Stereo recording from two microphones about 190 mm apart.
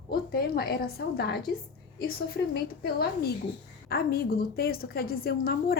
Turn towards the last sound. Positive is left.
turn(degrees=50)  # may be behind; listen again after turning